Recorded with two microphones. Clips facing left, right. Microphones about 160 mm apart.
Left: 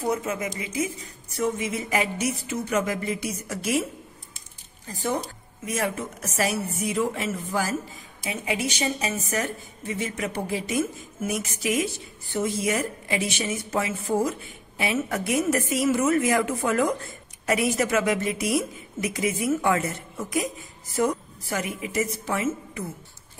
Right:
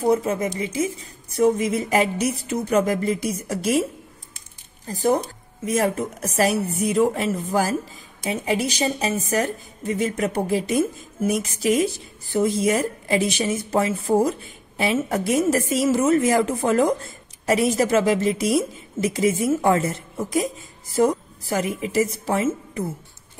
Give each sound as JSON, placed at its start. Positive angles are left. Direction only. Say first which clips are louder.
{"t": 0.0, "sound": "a woman's voice", "louder": "right 6 dB", "side_deg": -30}
{"t": 4.8, "sound": "a woman's voice", "louder": "right 7 dB", "side_deg": -40}